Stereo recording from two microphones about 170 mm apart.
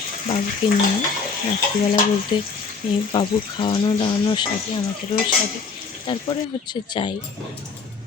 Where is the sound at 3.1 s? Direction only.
30° left (ahead or behind).